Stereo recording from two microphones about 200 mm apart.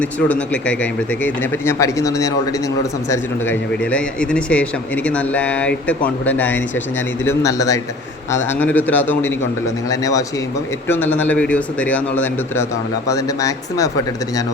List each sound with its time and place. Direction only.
0.0 s a man's voice: 5° left (ahead or behind)